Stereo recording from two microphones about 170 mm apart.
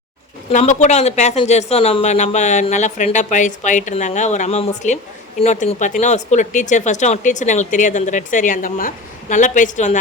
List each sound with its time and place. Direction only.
0.5 s speech: 45° left (ahead or behind)